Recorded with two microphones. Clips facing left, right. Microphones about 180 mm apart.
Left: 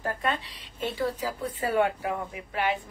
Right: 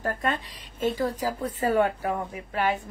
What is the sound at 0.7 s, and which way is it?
Speech, 45° right (ahead or behind).